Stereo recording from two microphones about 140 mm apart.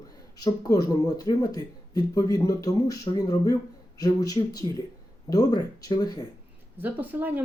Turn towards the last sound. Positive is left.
turn(degrees=-15)  # may be behind; listen again after turning